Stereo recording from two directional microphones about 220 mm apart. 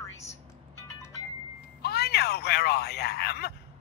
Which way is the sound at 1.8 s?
45° left (ahead or behind).